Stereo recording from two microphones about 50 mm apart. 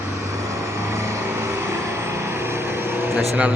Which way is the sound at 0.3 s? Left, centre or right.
Right.